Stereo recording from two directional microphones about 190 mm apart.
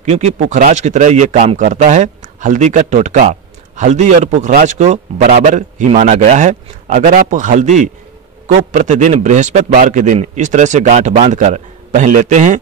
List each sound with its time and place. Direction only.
0.0 s speech: 35° right (ahead or behind)